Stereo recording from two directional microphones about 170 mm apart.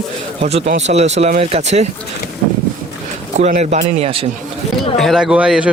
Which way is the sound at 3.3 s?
40° right (ahead or behind).